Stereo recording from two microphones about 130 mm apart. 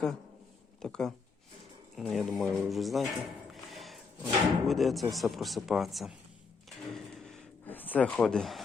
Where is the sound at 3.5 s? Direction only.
Centre (ahead or behind).